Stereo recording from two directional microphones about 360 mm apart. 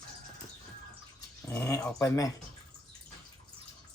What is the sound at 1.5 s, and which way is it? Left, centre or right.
Speech, centre.